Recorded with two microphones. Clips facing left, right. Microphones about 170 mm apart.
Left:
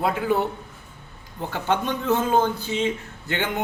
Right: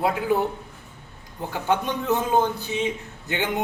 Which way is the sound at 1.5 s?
15° right (ahead or behind).